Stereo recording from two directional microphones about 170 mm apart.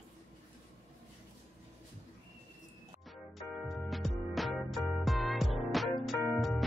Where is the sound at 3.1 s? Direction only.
Centre (ahead or behind).